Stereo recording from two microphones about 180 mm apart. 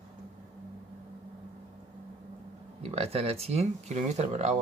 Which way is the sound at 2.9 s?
35° right (ahead or behind).